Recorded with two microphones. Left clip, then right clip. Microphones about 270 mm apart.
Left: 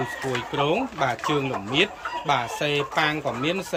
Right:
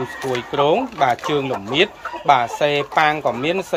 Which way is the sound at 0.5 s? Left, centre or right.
Centre.